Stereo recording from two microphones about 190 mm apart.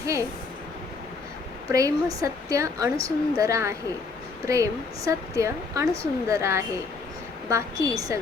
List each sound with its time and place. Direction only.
0.0 s speech: 15° right (ahead or behind)
1.6 s a woman's voice: 20° right (ahead or behind)